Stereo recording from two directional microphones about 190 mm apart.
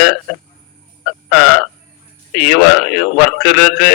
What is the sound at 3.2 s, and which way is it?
Speech, 55° left (ahead or behind).